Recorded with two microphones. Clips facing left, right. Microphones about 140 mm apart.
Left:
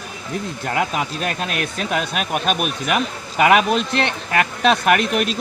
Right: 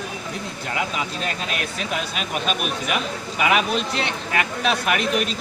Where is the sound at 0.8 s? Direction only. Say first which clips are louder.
Left 4 dB; 50° left (ahead or behind).